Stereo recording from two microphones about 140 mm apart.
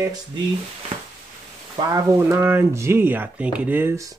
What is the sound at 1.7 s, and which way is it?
Speech, 30° right (ahead or behind).